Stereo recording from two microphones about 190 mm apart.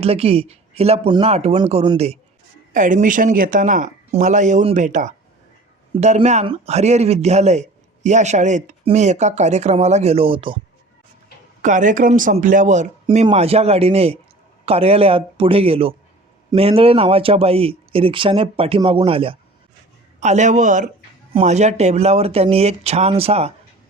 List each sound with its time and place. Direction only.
0.0 s speech: 30° right (ahead or behind)
2.7 s speech: 45° right (ahead or behind); by 10.6 s 25° right (ahead or behind)
11.6 s speech: 40° right (ahead or behind)
13.1 s speech: 30° right (ahead or behind)